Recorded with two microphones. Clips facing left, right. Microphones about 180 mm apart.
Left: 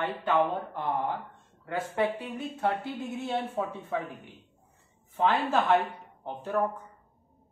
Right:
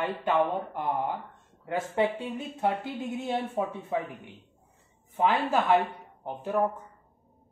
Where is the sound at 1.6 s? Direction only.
25° right (ahead or behind).